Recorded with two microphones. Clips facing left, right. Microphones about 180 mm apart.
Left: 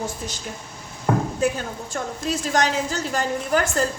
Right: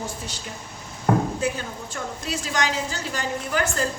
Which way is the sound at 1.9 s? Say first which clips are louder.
Left 5 dB; 45° left (ahead or behind).